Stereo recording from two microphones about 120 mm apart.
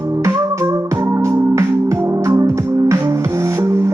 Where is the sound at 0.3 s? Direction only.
25° right (ahead or behind).